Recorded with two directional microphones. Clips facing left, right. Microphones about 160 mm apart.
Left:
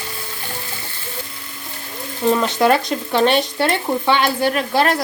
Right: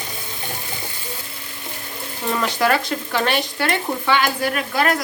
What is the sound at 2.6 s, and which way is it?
Speech, 25° left (ahead or behind).